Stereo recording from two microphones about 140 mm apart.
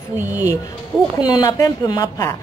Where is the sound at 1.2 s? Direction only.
30° left (ahead or behind).